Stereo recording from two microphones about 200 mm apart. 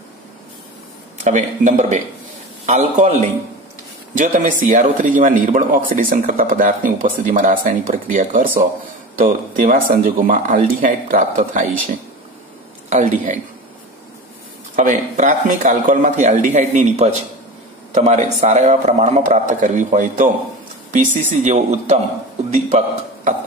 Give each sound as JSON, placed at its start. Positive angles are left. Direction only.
{"t": 1.2, "sound": "speech", "side_deg": -40}
{"t": 12.9, "sound": "speech", "side_deg": -40}
{"t": 14.8, "sound": "speech", "side_deg": -40}